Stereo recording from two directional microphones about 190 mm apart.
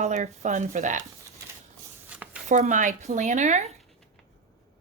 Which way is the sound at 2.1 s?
5° right (ahead or behind).